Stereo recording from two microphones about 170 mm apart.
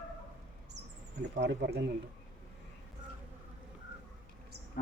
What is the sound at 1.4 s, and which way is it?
Speech, 70° right (ahead or behind).